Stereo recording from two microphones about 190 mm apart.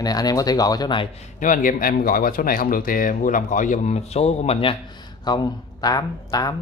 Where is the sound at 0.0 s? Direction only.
20° left (ahead or behind).